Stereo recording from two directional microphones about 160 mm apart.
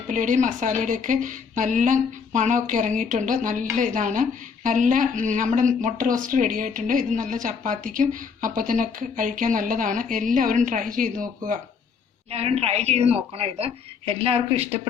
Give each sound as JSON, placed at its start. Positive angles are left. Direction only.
{"t": 0.1, "sound": "a woman's voice", "side_deg": -50}
{"t": 12.3, "sound": "a woman's voice", "side_deg": -40}